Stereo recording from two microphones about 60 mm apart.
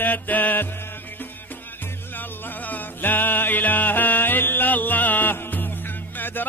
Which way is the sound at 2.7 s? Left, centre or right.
Left.